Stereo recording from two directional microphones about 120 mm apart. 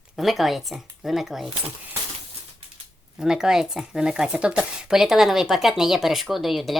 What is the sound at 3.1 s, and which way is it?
Speech, 5° right (ahead or behind).